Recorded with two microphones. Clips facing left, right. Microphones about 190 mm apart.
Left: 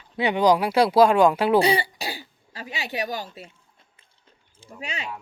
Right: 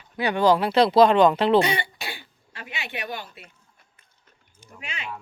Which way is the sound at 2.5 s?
35° left (ahead or behind).